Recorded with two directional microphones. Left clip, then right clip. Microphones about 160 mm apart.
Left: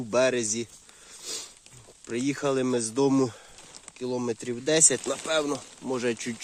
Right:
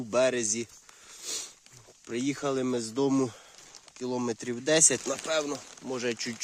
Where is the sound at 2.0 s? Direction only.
10° right (ahead or behind).